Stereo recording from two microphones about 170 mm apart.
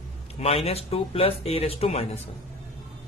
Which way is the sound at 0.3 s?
35° left (ahead or behind).